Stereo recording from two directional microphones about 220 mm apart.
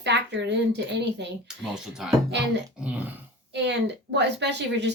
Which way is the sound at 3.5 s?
50° right (ahead or behind).